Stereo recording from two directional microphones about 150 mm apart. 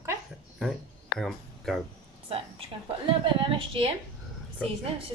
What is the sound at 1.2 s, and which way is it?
Speech, centre (ahead or behind).